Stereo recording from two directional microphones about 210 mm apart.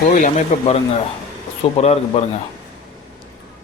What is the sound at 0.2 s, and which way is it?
A man's voice, 35° left (ahead or behind).